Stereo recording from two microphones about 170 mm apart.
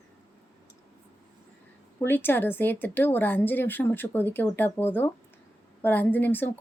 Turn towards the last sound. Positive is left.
turn(degrees=10)  # may be behind; listen again after turning